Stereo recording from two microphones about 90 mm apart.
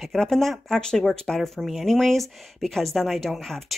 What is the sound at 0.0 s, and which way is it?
Speech, 5° left (ahead or behind).